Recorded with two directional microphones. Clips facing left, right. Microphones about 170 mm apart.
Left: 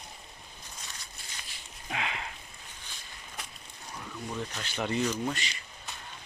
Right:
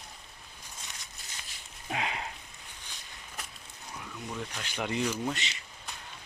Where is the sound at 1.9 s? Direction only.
40° right (ahead or behind).